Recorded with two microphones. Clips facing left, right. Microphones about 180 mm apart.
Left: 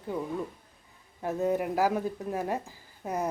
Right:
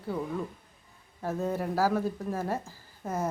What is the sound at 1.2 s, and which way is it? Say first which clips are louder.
Speech: left 3 dB; 20° left (ahead or behind).